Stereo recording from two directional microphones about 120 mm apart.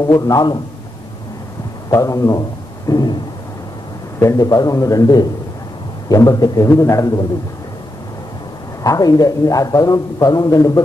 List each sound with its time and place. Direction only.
0.0 s a man's voice: 30° left (ahead or behind)
1.9 s a man's voice: 25° left (ahead or behind)
2.9 s a sound: 30° left (ahead or behind)
4.2 s a man's voice: 25° left (ahead or behind)
8.8 s a man's voice: 30° left (ahead or behind)